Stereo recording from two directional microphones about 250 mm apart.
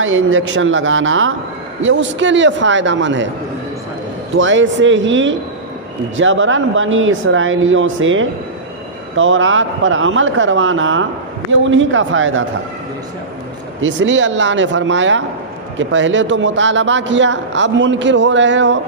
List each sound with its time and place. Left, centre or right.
0.0 s a man's voice: right
4.4 s a man's voice: right
13.8 s a man's voice: right